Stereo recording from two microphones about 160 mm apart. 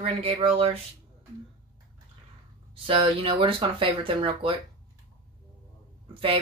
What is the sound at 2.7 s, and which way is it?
Speech, 35° right (ahead or behind).